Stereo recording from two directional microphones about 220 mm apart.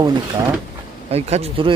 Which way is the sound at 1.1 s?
30° right (ahead or behind).